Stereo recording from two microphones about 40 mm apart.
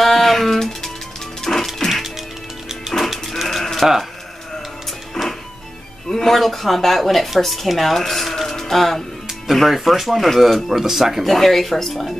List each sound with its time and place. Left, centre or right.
0.0 s music: centre
2.9 s livestock: centre
3.5 s sheep: centre
5.2 s music: centre
6.0 s speech: centre
11.2 s speech: centre